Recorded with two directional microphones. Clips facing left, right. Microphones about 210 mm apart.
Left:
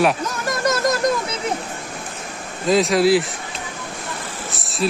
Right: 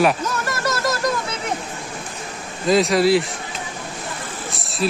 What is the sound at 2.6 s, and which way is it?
Speech, centre (ahead or behind).